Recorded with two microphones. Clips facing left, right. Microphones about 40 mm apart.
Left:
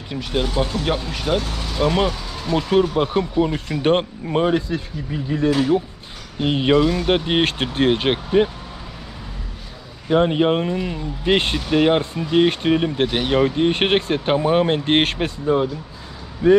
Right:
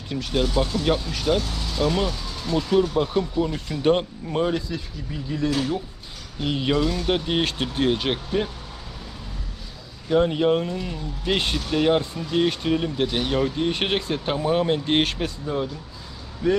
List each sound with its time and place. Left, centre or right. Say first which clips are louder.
0.1 s speech: left 1 dB; centre
10.1 s speech: left 3 dB; left